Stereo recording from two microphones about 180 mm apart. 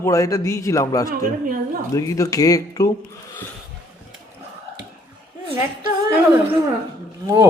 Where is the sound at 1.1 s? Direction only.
55° right (ahead or behind).